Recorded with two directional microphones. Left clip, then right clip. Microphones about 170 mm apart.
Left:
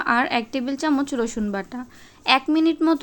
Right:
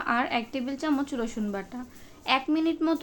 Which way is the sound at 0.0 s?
30° left (ahead or behind).